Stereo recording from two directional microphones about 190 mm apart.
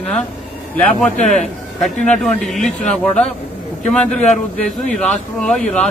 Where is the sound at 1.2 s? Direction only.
40° left (ahead or behind).